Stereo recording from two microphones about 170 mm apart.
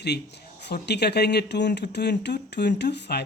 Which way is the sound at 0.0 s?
80° left.